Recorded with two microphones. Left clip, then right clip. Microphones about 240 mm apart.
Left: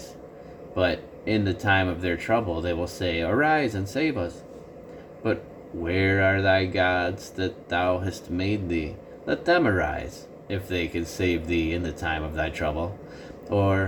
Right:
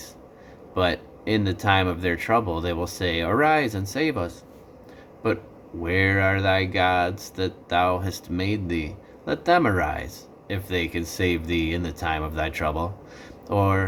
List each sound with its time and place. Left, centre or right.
0.8 s speech: centre
5.9 s speech: centre